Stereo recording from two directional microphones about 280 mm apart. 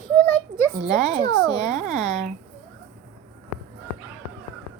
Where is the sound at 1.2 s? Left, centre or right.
Centre.